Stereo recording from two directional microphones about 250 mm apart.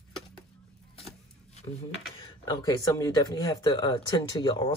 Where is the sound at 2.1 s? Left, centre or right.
Centre.